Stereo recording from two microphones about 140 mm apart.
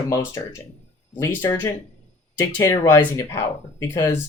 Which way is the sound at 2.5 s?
25° left (ahead or behind).